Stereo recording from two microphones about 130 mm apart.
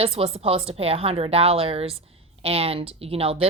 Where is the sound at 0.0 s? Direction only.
50° right (ahead or behind).